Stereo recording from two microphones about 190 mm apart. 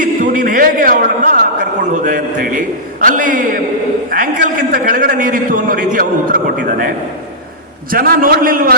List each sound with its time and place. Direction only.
0.0 s a man's voice: 45° right (ahead or behind)